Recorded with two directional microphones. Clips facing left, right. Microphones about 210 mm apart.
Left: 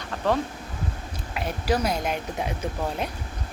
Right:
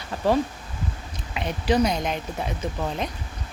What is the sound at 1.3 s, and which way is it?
Speech, 5° left (ahead or behind).